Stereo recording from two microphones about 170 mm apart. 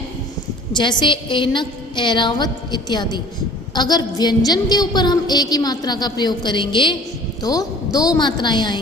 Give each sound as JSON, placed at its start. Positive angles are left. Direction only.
{"t": 0.7, "sound": "a woman's voice", "side_deg": 25}